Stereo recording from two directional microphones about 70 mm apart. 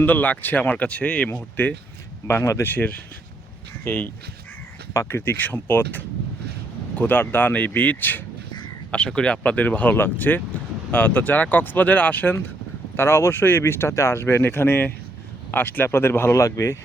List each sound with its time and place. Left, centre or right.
0.0 s speech: left
2.2 s speech: left
2.6 s speech: left
13.0 s speech: left